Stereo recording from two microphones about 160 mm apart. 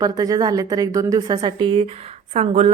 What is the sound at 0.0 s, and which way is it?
A woman's voice, 25° right (ahead or behind).